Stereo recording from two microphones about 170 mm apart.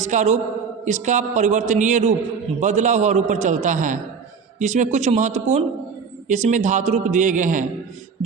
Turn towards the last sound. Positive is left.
turn(degrees=-50)  # may be behind; listen again after turning